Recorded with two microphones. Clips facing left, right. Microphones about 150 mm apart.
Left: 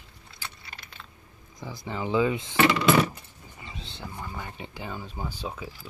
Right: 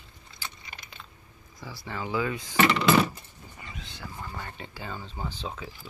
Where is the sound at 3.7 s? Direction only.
30° left (ahead or behind).